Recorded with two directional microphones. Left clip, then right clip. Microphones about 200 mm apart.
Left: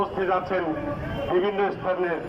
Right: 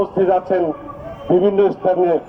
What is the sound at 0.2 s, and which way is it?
A man's voice, 60° right (ahead or behind).